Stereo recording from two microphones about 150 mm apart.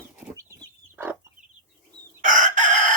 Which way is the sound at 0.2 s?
5° right (ahead or behind).